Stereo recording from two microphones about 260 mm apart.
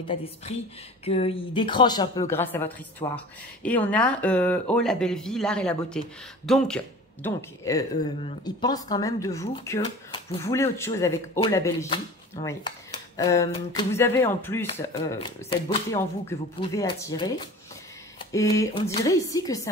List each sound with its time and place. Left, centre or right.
0.0 s speech: left; by 6.8 s centre
7.2 s speech: centre
18.3 s speech: centre